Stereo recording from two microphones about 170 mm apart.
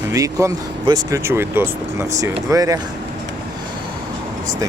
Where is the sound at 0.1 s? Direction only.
20° right (ahead or behind).